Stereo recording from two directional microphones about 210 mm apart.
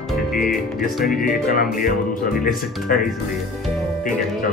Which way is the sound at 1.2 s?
40° left (ahead or behind).